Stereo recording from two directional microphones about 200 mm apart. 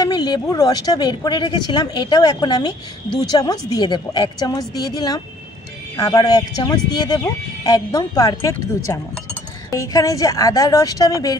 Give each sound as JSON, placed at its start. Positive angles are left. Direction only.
{"t": 0.0, "sound": "a woman's voice", "side_deg": 20}